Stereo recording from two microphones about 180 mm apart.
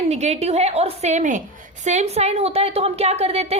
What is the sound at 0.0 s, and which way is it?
A woman's voice, 35° right (ahead or behind).